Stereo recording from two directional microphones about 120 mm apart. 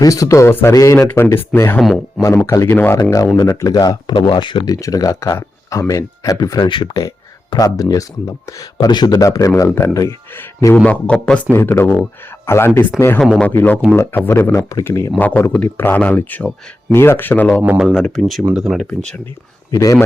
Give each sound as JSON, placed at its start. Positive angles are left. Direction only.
{"t": 0.0, "sound": "speech", "side_deg": 30}
{"t": 1.8, "sound": "speech", "side_deg": 0}
{"t": 2.2, "sound": "speech", "side_deg": 25}
{"t": 3.0, "sound": "speech", "side_deg": 30}
{"t": 6.7, "sound": "speech", "side_deg": 45}
{"t": 7.5, "sound": "speech", "side_deg": 30}
{"t": 10.8, "sound": "speech", "side_deg": 10}
{"t": 11.5, "sound": "speech", "side_deg": 20}
{"t": 17.6, "sound": "speech", "side_deg": -10}
{"t": 17.9, "sound": "speech", "side_deg": 5}
{"t": 18.9, "sound": "speech", "side_deg": 10}
{"t": 19.7, "sound": "speech", "side_deg": 25}